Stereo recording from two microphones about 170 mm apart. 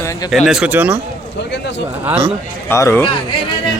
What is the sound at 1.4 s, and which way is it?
Speech, 90° left.